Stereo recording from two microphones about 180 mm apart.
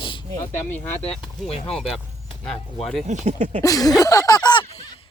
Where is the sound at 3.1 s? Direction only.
40° right (ahead or behind).